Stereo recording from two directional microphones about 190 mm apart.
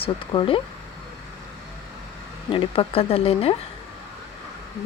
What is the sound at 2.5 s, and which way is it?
Speech, 30° left (ahead or behind).